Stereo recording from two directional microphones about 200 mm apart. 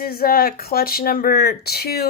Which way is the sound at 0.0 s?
45° left (ahead or behind).